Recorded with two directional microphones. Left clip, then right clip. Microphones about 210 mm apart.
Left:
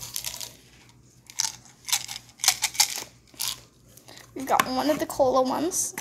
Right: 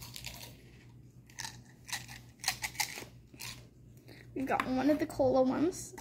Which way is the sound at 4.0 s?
40° left (ahead or behind).